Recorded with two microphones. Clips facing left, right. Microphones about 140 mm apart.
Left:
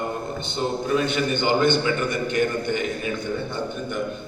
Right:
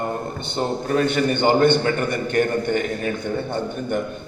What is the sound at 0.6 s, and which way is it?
A man's voice, 45° right (ahead or behind).